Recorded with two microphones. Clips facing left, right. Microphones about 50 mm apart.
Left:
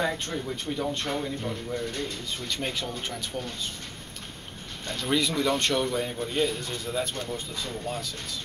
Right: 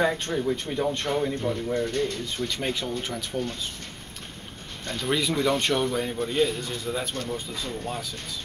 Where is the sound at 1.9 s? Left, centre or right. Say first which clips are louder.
Right 6 dB; right.